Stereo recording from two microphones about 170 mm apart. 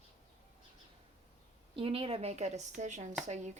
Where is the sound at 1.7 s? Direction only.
30° right (ahead or behind).